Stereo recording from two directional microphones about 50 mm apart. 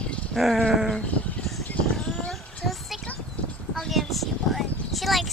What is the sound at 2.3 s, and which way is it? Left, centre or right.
Child singing, centre.